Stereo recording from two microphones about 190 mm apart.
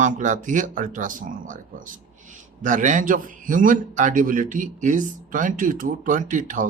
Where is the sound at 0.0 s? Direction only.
40° right (ahead or behind).